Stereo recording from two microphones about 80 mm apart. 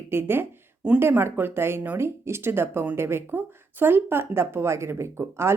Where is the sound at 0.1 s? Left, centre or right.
Right.